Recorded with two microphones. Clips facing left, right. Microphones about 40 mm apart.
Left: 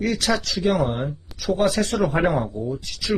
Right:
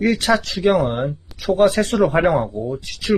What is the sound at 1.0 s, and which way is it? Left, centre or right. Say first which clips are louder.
Speech: right 4 dB; right.